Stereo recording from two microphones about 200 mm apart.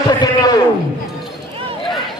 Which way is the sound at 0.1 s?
20° left (ahead or behind).